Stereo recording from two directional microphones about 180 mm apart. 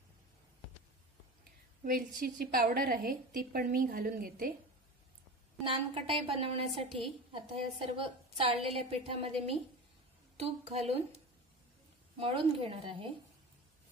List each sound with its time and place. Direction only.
1.9 s a woman's voice: 50° right (ahead or behind)
5.6 s a woman's voice: 30° right (ahead or behind)
12.2 s a woman's voice: 30° right (ahead or behind)